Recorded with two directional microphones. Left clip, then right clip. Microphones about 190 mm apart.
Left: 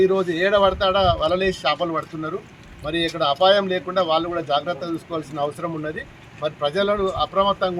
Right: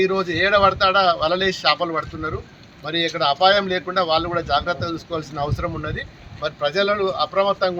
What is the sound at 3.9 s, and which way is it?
Speech, 15° left (ahead or behind).